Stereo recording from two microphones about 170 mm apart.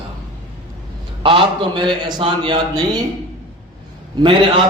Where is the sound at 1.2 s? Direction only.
30° right (ahead or behind).